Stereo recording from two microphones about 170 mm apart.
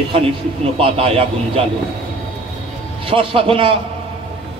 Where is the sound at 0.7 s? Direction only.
35° right (ahead or behind).